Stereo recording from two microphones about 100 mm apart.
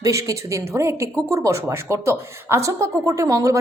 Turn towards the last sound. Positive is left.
turn(degrees=-35)  # may be behind; listen again after turning